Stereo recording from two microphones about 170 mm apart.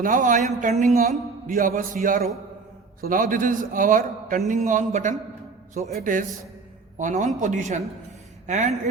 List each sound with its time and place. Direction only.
0.0 s a man's voice: 50° right (ahead or behind)